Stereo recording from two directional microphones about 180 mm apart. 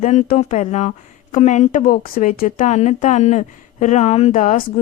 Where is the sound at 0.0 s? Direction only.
40° left (ahead or behind).